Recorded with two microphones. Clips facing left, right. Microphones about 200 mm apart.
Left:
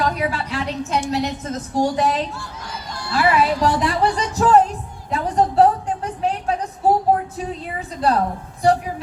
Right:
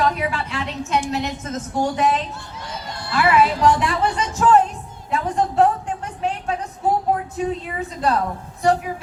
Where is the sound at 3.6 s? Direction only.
35° left (ahead or behind).